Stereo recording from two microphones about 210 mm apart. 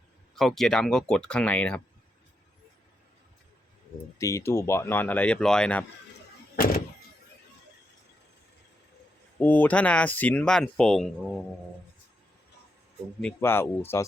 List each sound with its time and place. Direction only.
0.3 s speech: centre (ahead or behind)
4.2 s speech: 15° left (ahead or behind)
9.4 s speech: 10° left (ahead or behind)
13.2 s speech: 10° left (ahead or behind)